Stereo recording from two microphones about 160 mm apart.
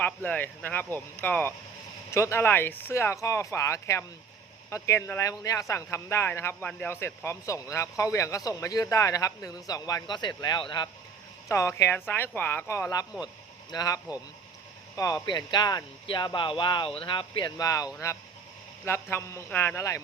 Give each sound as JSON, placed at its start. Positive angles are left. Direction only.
{"t": 0.0, "sound": "speech", "side_deg": 10}
{"t": 13.2, "sound": "a sound", "side_deg": 25}
{"t": 14.9, "sound": "speech", "side_deg": 25}
{"t": 19.1, "sound": "speech", "side_deg": 15}